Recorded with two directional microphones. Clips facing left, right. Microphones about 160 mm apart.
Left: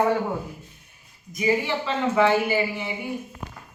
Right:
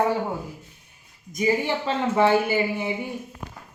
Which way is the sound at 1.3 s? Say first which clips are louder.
Right 1 dB; 45° right (ahead or behind).